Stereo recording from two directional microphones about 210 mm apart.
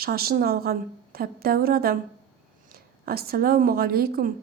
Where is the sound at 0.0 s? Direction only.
45° right (ahead or behind).